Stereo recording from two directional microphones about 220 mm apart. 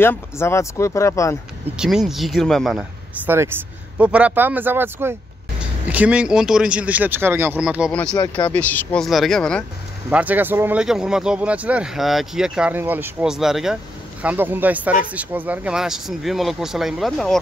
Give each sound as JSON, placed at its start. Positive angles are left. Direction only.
{"t": 0.0, "sound": "speech", "side_deg": 10}
{"t": 1.8, "sound": "speech", "side_deg": 0}
{"t": 8.2, "sound": "speech", "side_deg": 20}
{"t": 8.5, "sound": "speech", "side_deg": 5}
{"t": 10.0, "sound": "speech", "side_deg": -10}